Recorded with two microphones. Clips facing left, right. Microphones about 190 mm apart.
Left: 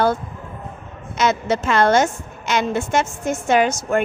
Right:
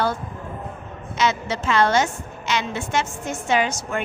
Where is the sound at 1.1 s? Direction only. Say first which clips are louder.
Left 4 dB; 50° left (ahead or behind).